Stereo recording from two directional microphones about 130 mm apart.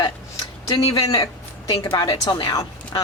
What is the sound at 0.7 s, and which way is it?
Speech, 50° left (ahead or behind).